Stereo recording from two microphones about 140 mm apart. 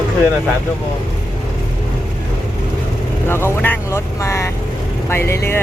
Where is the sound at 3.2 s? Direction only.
15° left (ahead or behind).